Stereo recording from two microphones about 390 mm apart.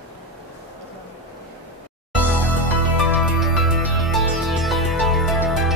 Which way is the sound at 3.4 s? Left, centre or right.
Centre.